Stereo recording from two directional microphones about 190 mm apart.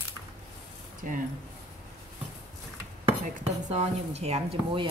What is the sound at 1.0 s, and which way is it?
Speech, 45° right (ahead or behind).